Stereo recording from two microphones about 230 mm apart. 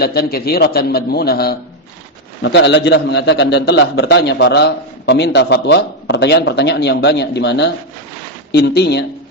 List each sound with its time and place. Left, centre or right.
0.0 s a man's voice: left